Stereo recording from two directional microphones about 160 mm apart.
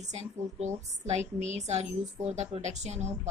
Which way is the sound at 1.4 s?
45° right (ahead or behind).